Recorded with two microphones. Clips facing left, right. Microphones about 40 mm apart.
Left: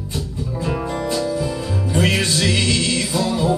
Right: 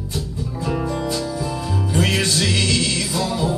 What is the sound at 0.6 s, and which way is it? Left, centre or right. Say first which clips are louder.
Music: right 1 dB; left.